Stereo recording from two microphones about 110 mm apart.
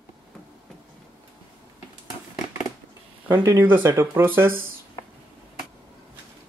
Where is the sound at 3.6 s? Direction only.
20° right (ahead or behind).